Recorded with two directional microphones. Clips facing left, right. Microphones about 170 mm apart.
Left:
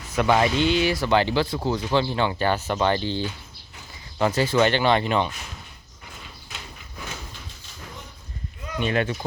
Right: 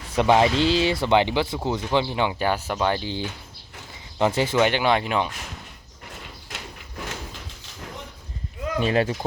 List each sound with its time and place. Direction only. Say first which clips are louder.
0.1 s speech: right 2 dB; 25° right (ahead or behind)
1.0 s speech: right 1 dB; 20° right (ahead or behind)
8.8 s speech: right 2 dB; 35° right (ahead or behind)